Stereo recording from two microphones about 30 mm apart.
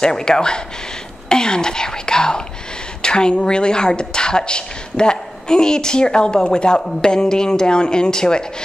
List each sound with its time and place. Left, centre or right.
0.0 s a woman's voice: left